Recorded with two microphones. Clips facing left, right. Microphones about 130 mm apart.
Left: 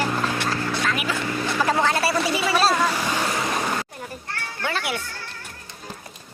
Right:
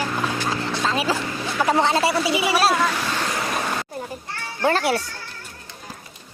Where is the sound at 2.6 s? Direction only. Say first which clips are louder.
Right 1 dB; centre (ahead or behind).